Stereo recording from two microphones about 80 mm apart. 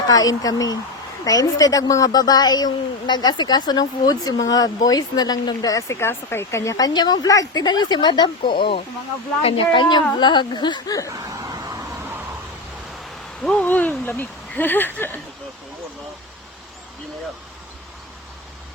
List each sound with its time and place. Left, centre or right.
0.1 s speech: left
5.9 s speech: left
9.7 s speech: left
11.2 s a sound: right
13.4 s speech: centre
13.7 s a sound: centre
14.0 s speech: left